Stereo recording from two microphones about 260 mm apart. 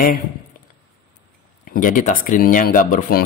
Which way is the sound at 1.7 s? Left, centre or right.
Left.